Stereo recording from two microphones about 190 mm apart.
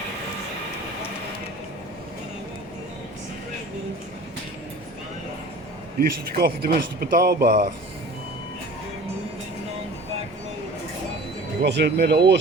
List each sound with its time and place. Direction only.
6.0 s speech: 55° right (ahead or behind)
11.6 s speech: 60° right (ahead or behind)